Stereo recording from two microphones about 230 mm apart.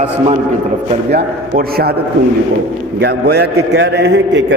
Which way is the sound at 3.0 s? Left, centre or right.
Right.